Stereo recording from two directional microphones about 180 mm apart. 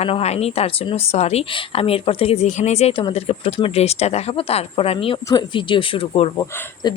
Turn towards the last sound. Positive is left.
turn(degrees=25)  # may be behind; listen again after turning